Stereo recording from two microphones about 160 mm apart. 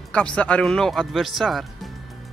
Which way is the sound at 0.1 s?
5° left (ahead or behind).